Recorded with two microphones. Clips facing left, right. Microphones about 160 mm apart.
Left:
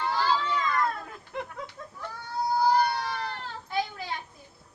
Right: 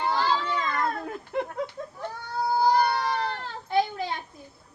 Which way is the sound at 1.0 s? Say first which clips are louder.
Right 7 dB; 45° right (ahead or behind).